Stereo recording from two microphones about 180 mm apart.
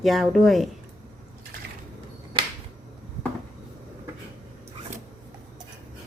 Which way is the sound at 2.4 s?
25° right (ahead or behind).